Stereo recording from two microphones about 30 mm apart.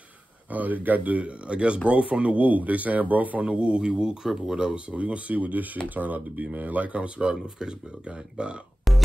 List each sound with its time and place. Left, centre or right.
0.5 s speech: right
1.5 s a man's voice: right
3.4 s a man's voice: right
4.2 s speech: centre
4.9 s speech: right
7.2 s speech: right
8.4 s a man's voice: right